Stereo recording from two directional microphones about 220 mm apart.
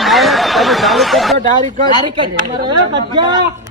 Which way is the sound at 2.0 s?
20° right (ahead or behind).